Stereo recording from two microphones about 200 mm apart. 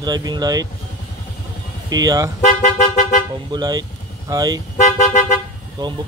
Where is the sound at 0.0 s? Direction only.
20° right (ahead or behind).